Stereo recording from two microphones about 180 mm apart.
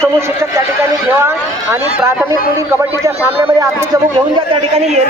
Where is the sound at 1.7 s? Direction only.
10° right (ahead or behind).